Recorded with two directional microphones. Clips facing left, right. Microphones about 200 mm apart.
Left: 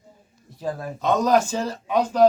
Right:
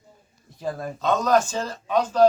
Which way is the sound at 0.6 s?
10° left (ahead or behind).